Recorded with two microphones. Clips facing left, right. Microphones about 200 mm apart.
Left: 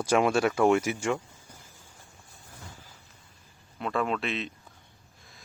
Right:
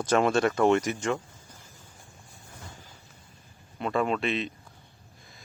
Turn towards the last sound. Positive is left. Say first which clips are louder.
# right 3 dB
turn(degrees=0)  # may be behind; listen again after turning